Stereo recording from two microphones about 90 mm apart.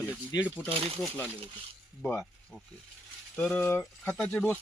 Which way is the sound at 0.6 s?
90° right.